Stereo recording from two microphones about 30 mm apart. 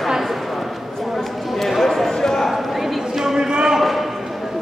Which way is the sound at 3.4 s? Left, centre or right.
Right.